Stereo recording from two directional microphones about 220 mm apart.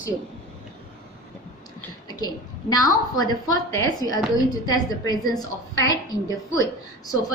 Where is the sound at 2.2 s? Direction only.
15° left (ahead or behind).